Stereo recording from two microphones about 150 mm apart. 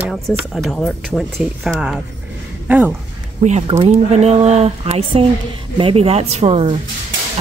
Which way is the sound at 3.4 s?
45° right (ahead or behind).